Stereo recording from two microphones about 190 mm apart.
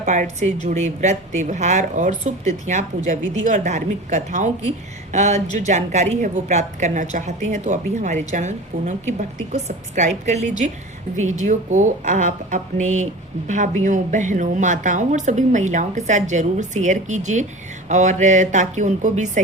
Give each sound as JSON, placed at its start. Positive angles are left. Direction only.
{"t": 0.0, "sound": "a woman's voice", "side_deg": -40}